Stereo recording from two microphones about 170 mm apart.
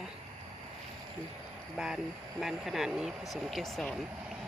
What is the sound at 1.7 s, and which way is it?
Speech, 5° right (ahead or behind).